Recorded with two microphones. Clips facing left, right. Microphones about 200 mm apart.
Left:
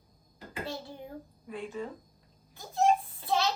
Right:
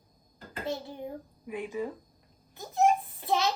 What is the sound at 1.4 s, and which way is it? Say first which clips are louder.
A child's voice: right 4 dB; 15° right (ahead or behind).